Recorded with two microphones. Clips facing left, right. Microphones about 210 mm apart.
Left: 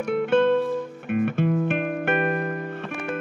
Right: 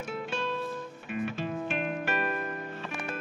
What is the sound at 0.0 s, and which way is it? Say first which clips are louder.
Music: left 14 dB; 60° left (ahead or behind).